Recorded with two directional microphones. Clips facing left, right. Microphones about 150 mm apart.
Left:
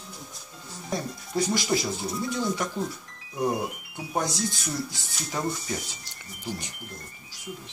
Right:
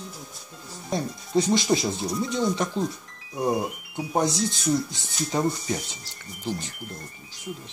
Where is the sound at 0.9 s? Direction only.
25° right (ahead or behind).